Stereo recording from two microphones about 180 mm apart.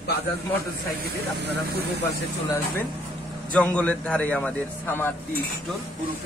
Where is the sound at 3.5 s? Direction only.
5° left (ahead or behind).